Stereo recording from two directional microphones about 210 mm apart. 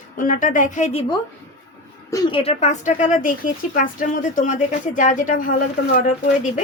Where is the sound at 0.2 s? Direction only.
40° left (ahead or behind).